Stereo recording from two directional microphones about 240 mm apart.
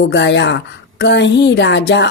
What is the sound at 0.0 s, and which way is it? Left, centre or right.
A woman's voice, left.